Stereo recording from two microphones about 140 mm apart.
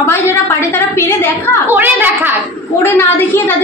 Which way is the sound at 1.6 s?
15° right (ahead or behind).